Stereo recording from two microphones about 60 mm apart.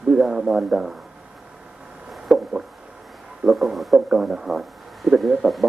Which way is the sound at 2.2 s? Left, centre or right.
Centre.